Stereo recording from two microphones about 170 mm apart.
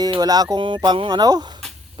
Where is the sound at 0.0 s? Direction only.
20° right (ahead or behind).